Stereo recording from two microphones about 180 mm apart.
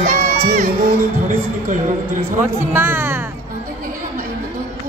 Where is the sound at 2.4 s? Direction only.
10° right (ahead or behind).